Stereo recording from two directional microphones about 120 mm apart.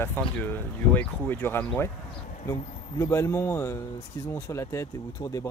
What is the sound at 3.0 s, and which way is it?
Speech, 25° left (ahead or behind).